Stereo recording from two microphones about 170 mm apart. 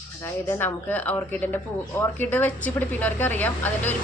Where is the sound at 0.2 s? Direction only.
15° left (ahead or behind).